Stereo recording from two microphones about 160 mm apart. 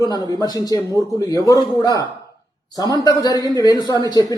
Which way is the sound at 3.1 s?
25° left (ahead or behind).